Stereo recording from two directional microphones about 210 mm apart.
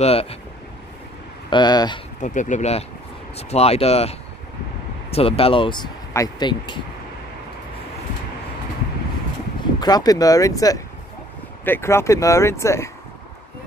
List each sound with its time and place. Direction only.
0.0 s speech: 30° left (ahead or behind)
1.5 s speech: 20° left (ahead or behind)
2.2 s speech: 35° left (ahead or behind)
9.8 s speech: 20° left (ahead or behind)